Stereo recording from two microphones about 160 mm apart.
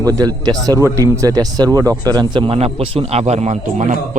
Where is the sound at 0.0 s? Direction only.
20° right (ahead or behind).